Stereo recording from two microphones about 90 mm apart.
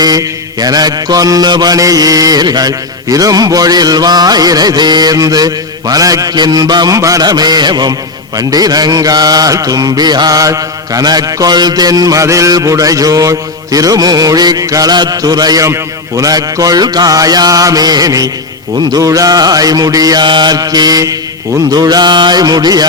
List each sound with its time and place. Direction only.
0.0 s mantra: 45° right (ahead or behind)
5.9 s a man's voice: 40° right (ahead or behind)
6.3 s mantra: 50° right (ahead or behind)
20.2 s mantra: 60° right (ahead or behind)